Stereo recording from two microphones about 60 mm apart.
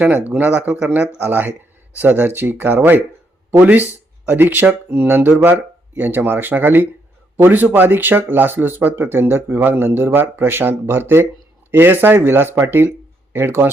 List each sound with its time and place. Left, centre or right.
0.0 s speech: right